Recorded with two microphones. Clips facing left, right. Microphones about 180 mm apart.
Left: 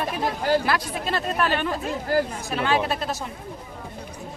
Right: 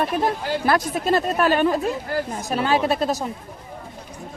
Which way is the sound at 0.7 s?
45° right (ahead or behind).